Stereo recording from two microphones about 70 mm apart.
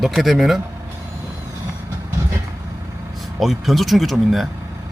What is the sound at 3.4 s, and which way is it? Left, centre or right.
Speech, centre.